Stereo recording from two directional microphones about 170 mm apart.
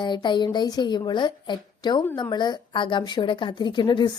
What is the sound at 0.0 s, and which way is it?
A woman's voice, 25° left (ahead or behind).